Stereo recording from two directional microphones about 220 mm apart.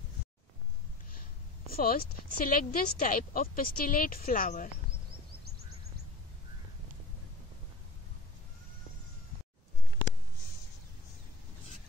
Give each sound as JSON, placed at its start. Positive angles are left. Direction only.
{"t": 1.7, "sound": "speech", "side_deg": 40}